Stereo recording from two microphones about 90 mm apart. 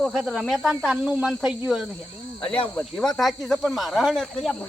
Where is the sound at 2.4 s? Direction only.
80° left.